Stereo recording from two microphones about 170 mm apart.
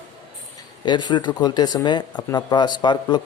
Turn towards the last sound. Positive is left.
turn(degrees=25)  # may be behind; listen again after turning